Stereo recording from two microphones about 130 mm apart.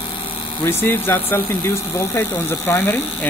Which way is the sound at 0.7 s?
15° left (ahead or behind).